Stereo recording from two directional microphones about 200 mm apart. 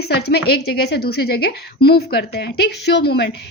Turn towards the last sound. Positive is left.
turn(degrees=55)  # may be behind; listen again after turning